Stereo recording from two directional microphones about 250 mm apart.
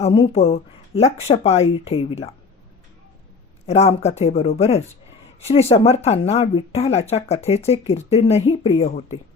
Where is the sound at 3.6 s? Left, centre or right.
Left.